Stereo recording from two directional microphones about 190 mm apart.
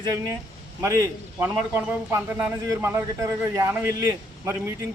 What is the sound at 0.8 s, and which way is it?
Speech, 15° right (ahead or behind).